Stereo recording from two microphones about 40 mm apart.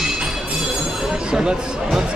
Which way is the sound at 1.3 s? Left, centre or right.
Centre.